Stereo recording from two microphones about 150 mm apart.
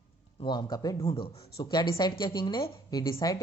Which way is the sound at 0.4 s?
30° left (ahead or behind).